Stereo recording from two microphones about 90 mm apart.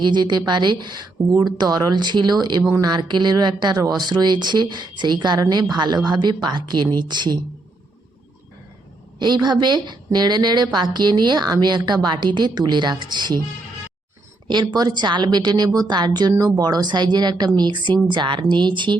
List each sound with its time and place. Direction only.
0.0 s a woman's voice: 55° right (ahead or behind)
9.1 s a woman's voice: 55° right (ahead or behind)
14.4 s a woman's voice: 55° right (ahead or behind)